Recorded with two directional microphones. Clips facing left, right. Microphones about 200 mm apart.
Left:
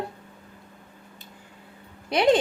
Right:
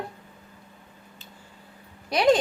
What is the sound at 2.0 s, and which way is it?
Speech, 25° left (ahead or behind).